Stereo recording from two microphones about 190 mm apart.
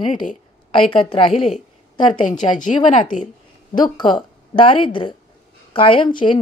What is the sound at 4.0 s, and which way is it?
Speech, 25° left (ahead or behind).